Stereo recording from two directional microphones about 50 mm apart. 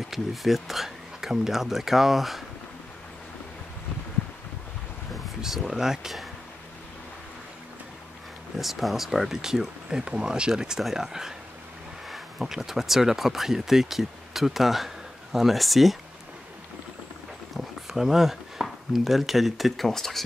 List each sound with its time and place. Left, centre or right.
0.1 s speech: centre
5.4 s speech: centre
8.5 s speech: centre
17.6 s speech: centre